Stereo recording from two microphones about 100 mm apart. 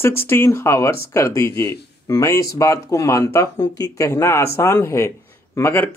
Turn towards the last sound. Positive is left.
turn(degrees=30)  # may be behind; listen again after turning